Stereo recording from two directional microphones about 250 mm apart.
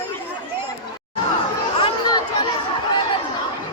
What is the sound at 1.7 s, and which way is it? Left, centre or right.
Chatter, centre.